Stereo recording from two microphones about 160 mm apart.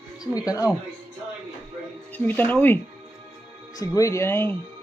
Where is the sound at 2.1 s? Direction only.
10° left (ahead or behind).